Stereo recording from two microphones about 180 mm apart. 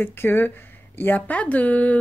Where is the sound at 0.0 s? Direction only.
10° left (ahead or behind).